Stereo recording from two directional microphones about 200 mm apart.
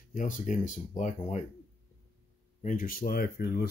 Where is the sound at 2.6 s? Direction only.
45° left (ahead or behind).